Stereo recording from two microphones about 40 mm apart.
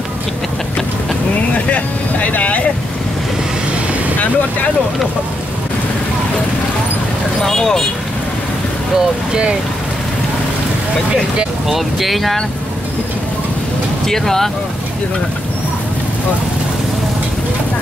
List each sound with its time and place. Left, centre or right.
1.5 s vehicle: left
7.4 s speech: centre
8.9 s speech: right
11.7 s speech: centre
14.0 s speech: centre